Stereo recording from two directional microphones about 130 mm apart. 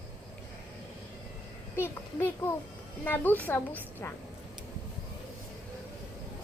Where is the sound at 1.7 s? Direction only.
20° left (ahead or behind).